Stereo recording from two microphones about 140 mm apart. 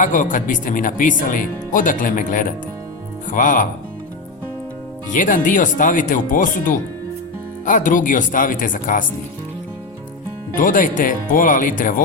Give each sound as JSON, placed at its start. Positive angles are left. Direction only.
{"t": 0.0, "sound": "speech", "side_deg": 70}
{"t": 5.1, "sound": "speech", "side_deg": 70}
{"t": 10.6, "sound": "speech", "side_deg": 75}